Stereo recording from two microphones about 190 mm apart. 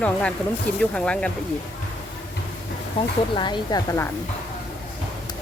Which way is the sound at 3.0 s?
25° left (ahead or behind).